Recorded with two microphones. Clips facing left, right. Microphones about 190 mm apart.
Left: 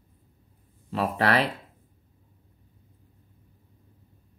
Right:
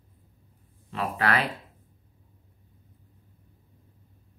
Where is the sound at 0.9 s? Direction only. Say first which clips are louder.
Left 3 dB; 35° left (ahead or behind).